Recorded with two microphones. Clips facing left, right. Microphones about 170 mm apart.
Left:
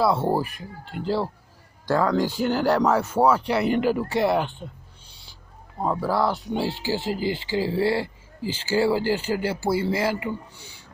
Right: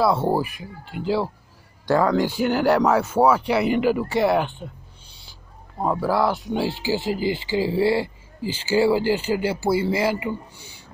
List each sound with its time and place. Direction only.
0.0 s speech: centre (ahead or behind)
2.1 s speech: 65° right (ahead or behind)
2.4 s speech: 10° right (ahead or behind)
5.8 s speech: 10° right (ahead or behind)